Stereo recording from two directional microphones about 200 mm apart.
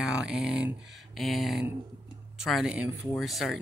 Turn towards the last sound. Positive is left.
turn(degrees=0)  # may be behind; listen again after turning